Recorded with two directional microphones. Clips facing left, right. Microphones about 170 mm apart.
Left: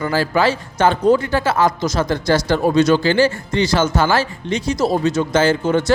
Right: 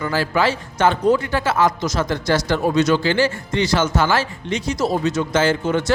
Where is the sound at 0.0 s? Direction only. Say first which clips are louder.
Left 2 dB; 35° left (ahead or behind).